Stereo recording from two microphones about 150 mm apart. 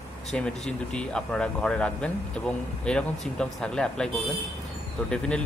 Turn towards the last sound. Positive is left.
turn(degrees=5)  # may be behind; listen again after turning